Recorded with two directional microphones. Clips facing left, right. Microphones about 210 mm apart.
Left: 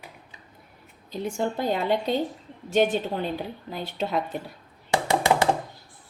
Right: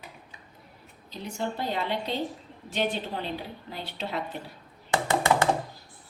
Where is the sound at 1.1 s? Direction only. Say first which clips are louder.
Left 5 dB; 50° left (ahead or behind).